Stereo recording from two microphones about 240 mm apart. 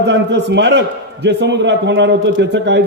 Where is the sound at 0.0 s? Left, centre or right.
Right.